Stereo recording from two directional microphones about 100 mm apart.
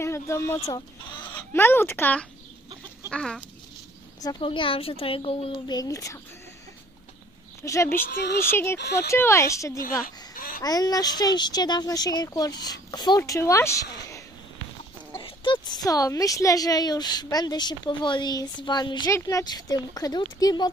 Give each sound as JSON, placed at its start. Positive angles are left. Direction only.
{"t": 0.0, "sound": "speech", "side_deg": 25}
{"t": 3.1, "sound": "chicken", "side_deg": 10}
{"t": 4.4, "sound": "speech", "side_deg": 60}
{"t": 5.7, "sound": "speech", "side_deg": 35}
{"t": 7.6, "sound": "a woman's voice", "side_deg": 30}
{"t": 13.2, "sound": "speech", "side_deg": 30}
{"t": 15.2, "sound": "speech", "side_deg": 55}
{"t": 19.0, "sound": "speech", "side_deg": 30}
{"t": 19.4, "sound": "speech", "side_deg": 40}